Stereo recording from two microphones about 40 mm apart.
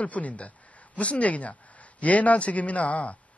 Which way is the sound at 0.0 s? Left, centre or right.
Left.